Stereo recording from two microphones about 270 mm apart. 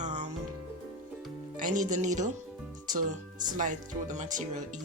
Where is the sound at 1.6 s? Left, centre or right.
Right.